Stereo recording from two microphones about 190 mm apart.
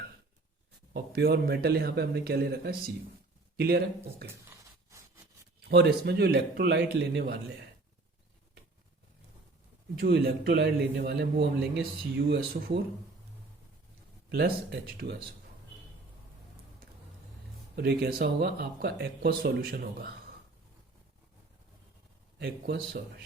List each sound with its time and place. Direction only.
0.9 s a man's voice: 55° right (ahead or behind)
4.4 s a sound: 15° right (ahead or behind)
5.6 s a man's voice: 60° right (ahead or behind)
10.0 s a man's voice: 55° right (ahead or behind)
14.3 s a man's voice: 55° right (ahead or behind)
17.7 s a man's voice: 55° right (ahead or behind)
22.4 s a man's voice: 60° right (ahead or behind)